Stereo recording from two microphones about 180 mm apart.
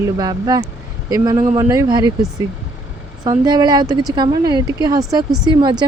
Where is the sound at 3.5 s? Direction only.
20° right (ahead or behind).